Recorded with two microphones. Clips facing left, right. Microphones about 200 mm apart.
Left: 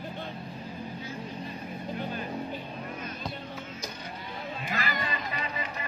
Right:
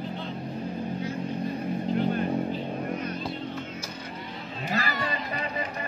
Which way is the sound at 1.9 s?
55° right (ahead or behind).